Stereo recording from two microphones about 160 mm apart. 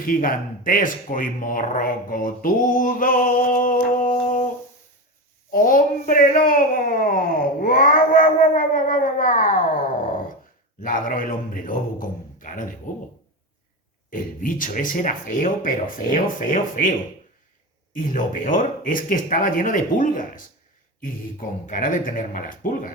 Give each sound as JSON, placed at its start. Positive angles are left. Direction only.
{"t": 0.0, "sound": "speech", "side_deg": 60}
{"t": 5.5, "sound": "a man's voice", "side_deg": 60}
{"t": 14.1, "sound": "speech", "side_deg": 55}
{"t": 17.9, "sound": "speech", "side_deg": 55}
{"t": 21.7, "sound": "speech", "side_deg": 55}